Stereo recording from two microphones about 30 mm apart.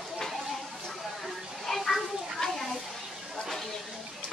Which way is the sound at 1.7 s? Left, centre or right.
Centre.